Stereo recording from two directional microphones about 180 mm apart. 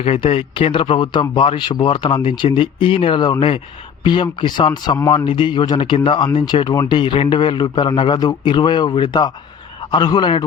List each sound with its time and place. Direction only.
0.0 s a man's voice: 35° left (ahead or behind)